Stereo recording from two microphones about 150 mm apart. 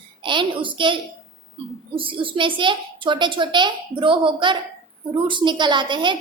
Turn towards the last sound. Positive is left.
turn(degrees=-30)  # may be behind; listen again after turning